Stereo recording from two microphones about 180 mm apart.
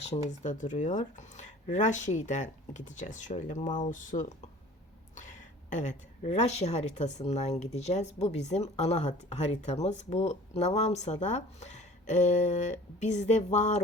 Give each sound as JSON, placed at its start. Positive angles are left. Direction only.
{"t": 0.0, "sound": "a woman's voice", "side_deg": 40}